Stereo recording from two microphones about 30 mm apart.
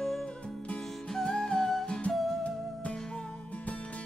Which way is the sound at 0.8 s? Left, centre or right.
Centre.